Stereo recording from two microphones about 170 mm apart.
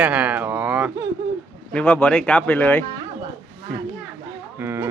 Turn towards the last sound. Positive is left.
turn(degrees=-15)  # may be behind; listen again after turning